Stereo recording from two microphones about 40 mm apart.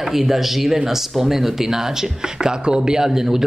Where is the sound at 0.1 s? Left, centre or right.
Centre.